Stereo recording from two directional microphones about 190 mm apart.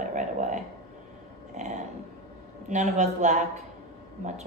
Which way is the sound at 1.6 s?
35° right (ahead or behind).